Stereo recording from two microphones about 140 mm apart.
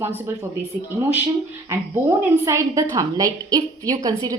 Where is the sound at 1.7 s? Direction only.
20° right (ahead or behind).